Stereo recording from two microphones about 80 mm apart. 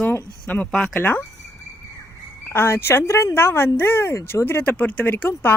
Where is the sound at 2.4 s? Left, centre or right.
Left.